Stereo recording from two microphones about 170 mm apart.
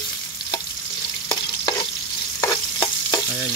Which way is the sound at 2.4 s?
20° left (ahead or behind).